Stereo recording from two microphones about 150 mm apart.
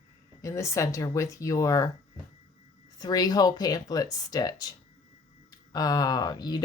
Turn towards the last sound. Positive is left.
turn(degrees=25)  # may be behind; listen again after turning